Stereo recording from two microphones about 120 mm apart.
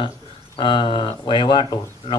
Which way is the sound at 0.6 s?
45° left (ahead or behind).